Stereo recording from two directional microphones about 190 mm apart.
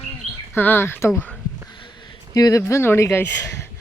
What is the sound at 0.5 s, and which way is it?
A woman's voice, 10° left (ahead or behind).